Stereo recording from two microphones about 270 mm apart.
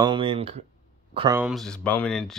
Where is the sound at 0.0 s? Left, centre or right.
Centre.